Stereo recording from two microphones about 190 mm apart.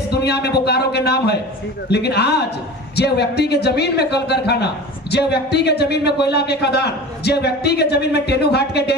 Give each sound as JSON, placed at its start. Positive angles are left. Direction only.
{"t": 0.1, "sound": "speech", "side_deg": 60}